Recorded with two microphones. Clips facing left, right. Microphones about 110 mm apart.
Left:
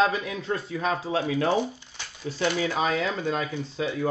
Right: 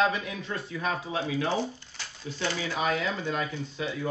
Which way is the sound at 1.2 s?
50° left (ahead or behind).